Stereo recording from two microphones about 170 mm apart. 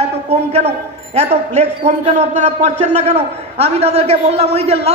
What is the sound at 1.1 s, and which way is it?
A man's voice, 40° right (ahead or behind).